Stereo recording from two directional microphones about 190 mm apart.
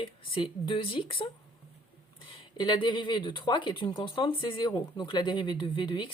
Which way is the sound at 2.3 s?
25° left (ahead or behind).